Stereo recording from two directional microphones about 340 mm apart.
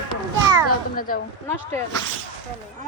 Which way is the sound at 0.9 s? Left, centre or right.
Left.